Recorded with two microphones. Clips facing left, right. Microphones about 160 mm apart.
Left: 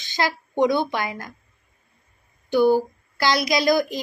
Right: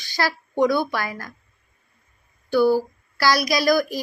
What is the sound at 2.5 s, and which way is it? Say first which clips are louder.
A woman's voice: even; 20° left (ahead or behind).